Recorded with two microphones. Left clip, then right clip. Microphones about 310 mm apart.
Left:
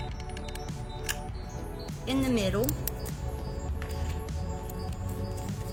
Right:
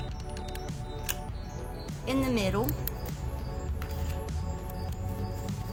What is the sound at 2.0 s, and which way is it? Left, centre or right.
Speech, right.